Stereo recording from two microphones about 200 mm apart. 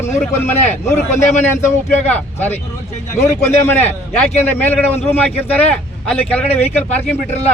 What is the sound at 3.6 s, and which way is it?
A man's voice, 10° left (ahead or behind).